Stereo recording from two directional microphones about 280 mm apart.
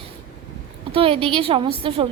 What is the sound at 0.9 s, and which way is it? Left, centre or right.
A woman's voice, centre.